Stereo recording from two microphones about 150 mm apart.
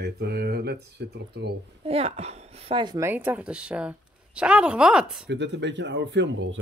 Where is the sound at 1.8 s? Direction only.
40° right (ahead or behind).